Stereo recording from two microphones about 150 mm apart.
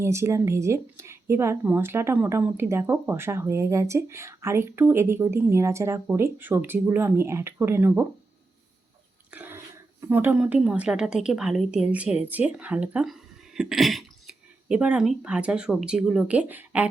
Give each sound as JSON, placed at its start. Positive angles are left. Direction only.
{"t": 0.0, "sound": "a woman's voice", "side_deg": -20}
{"t": 9.3, "sound": "a sound", "side_deg": -10}
{"t": 10.0, "sound": "a woman's voice", "side_deg": -15}